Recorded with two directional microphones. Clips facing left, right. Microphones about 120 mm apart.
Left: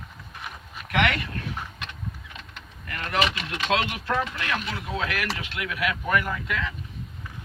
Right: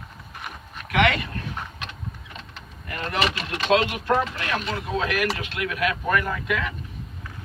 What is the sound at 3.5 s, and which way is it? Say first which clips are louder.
Speech: right 4 dB; 25° right (ahead or behind).